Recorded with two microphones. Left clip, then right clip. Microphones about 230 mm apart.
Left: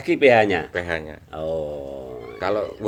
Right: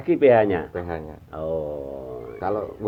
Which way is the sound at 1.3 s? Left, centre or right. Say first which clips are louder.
Left 1 dB; left.